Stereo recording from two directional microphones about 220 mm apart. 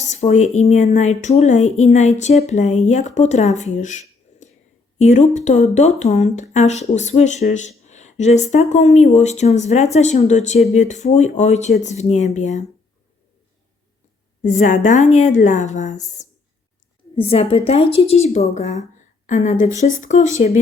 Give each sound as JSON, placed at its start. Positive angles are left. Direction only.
{"t": 0.1, "sound": "speech", "side_deg": 30}
{"t": 14.4, "sound": "a woman's voice", "side_deg": 35}